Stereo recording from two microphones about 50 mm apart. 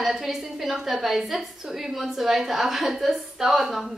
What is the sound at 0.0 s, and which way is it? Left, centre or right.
A woman's voice, centre.